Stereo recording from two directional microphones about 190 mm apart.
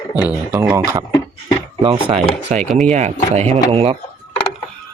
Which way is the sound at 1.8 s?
25° right (ahead or behind).